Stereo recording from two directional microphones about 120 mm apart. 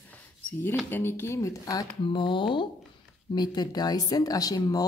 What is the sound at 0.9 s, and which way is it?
Speech, 15° left (ahead or behind).